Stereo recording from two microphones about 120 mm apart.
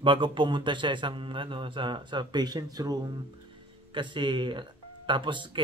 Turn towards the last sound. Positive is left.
turn(degrees=-40)  # may be behind; listen again after turning